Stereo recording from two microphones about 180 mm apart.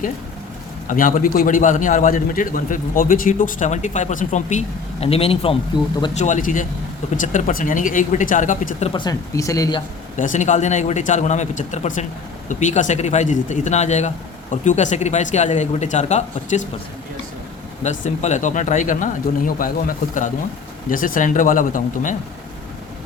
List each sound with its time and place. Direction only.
0.9 s a man's voice: 50° left (ahead or behind); by 5.5 s 30° left (ahead or behind)
6.1 s a man's voice: 40° left (ahead or behind)
8.9 s speech: 25° left (ahead or behind)
10.2 s speech: 45° left (ahead or behind)
17.8 s a man's voice: 40° left (ahead or behind)
20.9 s a man's voice: 50° left (ahead or behind)